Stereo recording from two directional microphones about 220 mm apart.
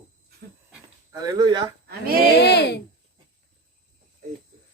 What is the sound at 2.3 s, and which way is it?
Speech, 50° left (ahead or behind).